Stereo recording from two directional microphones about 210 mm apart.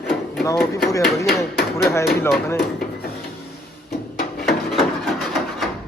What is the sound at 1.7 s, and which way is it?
Speech, 15° left (ahead or behind).